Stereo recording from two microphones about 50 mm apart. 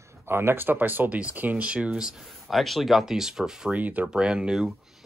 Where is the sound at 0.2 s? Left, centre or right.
Right.